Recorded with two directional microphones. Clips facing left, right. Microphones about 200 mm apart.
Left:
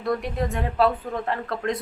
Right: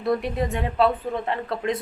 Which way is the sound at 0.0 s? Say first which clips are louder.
Right 2 dB; centre (ahead or behind).